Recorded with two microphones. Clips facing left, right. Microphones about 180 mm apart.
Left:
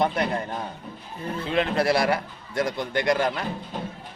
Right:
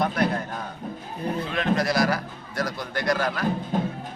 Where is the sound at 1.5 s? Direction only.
30° left (ahead or behind).